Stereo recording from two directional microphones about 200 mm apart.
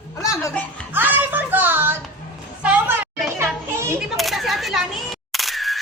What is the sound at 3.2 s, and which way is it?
Children playing, 10° right (ahead or behind).